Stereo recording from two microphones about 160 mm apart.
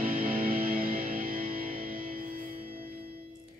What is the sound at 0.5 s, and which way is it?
Music, 65° right (ahead or behind).